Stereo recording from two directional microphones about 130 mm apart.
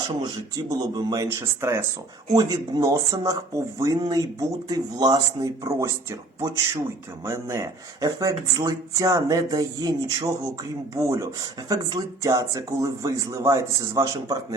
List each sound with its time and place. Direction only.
0.1 s speech: 35° right (ahead or behind)